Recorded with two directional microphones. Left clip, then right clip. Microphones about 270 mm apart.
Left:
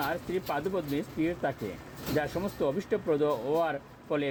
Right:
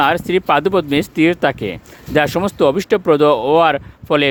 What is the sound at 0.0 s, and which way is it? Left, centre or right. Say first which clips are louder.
Speech: right 17 dB; right.